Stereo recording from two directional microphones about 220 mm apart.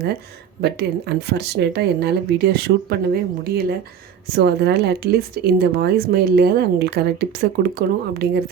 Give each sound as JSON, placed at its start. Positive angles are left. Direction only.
{"t": 0.6, "sound": "speech", "side_deg": -50}